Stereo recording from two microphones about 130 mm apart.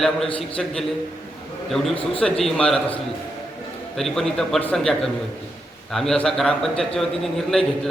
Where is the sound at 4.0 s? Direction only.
5° left (ahead or behind).